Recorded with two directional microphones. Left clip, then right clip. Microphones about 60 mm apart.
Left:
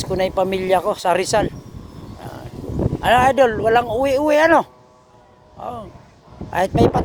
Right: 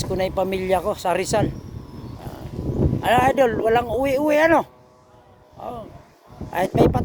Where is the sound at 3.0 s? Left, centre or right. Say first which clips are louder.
Left 4 dB; right.